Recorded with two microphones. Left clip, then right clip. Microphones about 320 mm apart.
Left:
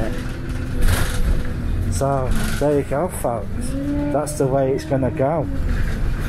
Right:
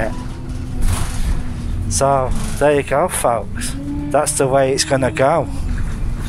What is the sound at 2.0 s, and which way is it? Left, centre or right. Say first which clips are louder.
Speech: right 6 dB; right.